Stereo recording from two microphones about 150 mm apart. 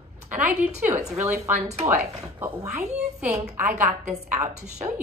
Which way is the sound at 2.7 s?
50° right (ahead or behind).